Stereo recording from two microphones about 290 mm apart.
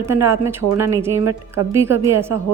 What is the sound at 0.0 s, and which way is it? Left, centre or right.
A woman's voice, centre.